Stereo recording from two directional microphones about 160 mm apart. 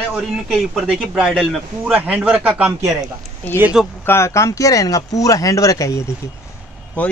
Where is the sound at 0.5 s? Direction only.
Centre (ahead or behind).